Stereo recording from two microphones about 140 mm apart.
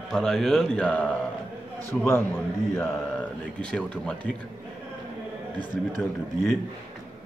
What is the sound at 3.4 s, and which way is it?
Speech, 5° left (ahead or behind).